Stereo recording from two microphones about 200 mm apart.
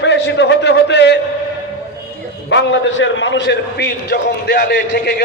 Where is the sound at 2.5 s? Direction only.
65° left (ahead or behind).